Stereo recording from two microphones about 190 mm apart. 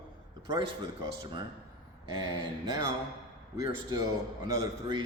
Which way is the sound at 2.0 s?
20° right (ahead or behind).